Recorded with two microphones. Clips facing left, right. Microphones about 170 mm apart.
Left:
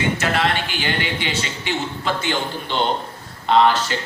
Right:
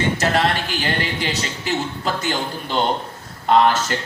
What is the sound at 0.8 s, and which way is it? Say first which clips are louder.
A man's voice: right 1 dB; 40° right (ahead or behind).